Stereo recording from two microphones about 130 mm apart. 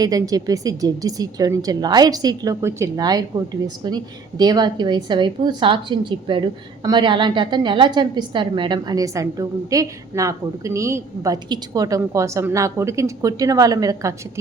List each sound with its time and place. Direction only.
0.0 s a woman's voice: 30° right (ahead or behind)